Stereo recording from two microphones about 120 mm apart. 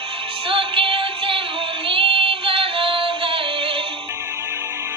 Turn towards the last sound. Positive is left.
turn(degrees=-45)  # may be behind; listen again after turning